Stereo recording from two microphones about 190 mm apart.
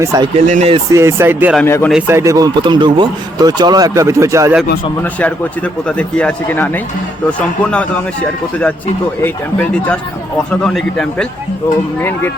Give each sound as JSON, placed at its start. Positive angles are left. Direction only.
{"t": 0.0, "sound": "speech", "side_deg": -15}
{"t": 0.3, "sound": "speech", "side_deg": -40}
{"t": 0.9, "sound": "speech", "side_deg": -15}
{"t": 1.6, "sound": "a man's voice", "side_deg": 15}
{"t": 1.9, "sound": "speech", "side_deg": -10}
{"t": 5.0, "sound": "a man's voice", "side_deg": 10}
{"t": 9.2, "sound": "a man's voice", "side_deg": 5}